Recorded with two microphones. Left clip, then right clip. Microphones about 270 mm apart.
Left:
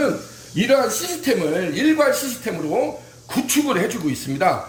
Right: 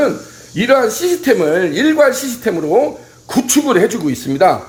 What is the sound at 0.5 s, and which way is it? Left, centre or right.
Speech, centre.